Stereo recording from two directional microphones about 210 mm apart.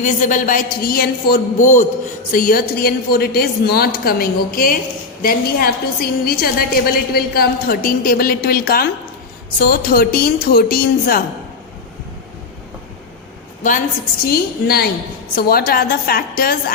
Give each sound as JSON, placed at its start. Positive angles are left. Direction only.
{"t": 0.0, "sound": "a man's voice", "side_deg": 35}
{"t": 13.6, "sound": "a woman's voice", "side_deg": 40}
{"t": 14.3, "sound": "a woman's voice", "side_deg": 50}